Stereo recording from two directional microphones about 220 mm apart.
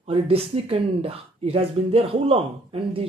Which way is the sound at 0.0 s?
25° right (ahead or behind).